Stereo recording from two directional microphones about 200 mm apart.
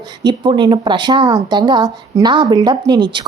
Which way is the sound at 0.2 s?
20° right (ahead or behind).